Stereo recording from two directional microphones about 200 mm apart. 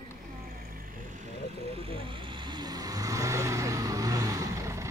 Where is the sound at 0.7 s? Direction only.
40° right (ahead or behind); by 4.9 s 15° right (ahead or behind).